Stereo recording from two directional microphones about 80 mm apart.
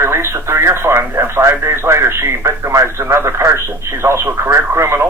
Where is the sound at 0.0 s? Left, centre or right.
Right.